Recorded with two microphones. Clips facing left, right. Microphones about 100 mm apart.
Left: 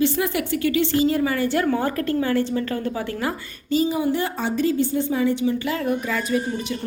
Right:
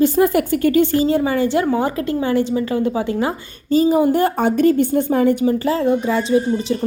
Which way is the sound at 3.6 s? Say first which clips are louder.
Right 7 dB; 40° right (ahead or behind).